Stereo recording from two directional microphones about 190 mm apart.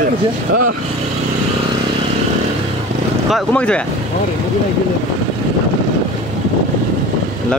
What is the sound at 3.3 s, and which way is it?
Speech, 5° left (ahead or behind).